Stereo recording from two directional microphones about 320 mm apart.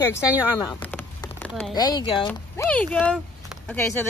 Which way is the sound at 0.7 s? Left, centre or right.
Centre.